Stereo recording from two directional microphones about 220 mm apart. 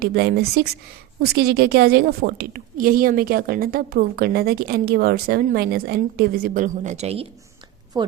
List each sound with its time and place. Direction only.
0.0 s a woman's voice: 45° right (ahead or behind); by 7.3 s 30° right (ahead or behind)
7.9 s speech: 20° right (ahead or behind)